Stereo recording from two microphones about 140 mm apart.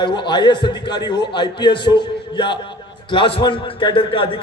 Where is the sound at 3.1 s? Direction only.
40° left (ahead or behind).